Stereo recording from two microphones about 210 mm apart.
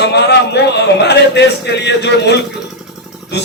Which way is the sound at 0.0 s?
55° left (ahead or behind).